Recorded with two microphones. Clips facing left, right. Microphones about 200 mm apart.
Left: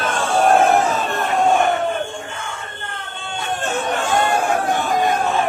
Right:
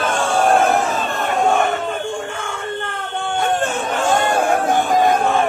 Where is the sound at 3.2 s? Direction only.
55° right (ahead or behind).